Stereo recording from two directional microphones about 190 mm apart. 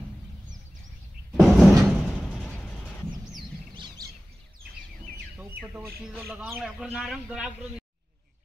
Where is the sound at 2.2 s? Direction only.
5° left (ahead or behind).